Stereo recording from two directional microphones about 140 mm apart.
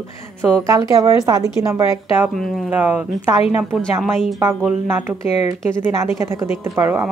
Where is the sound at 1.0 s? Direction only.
25° right (ahead or behind).